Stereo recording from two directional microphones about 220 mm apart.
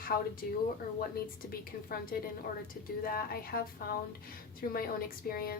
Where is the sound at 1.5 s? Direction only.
40° left (ahead or behind).